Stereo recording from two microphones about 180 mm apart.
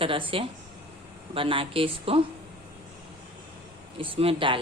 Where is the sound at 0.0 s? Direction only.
30° right (ahead or behind).